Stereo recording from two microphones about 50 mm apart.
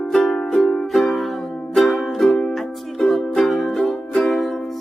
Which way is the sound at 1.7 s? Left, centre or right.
Centre.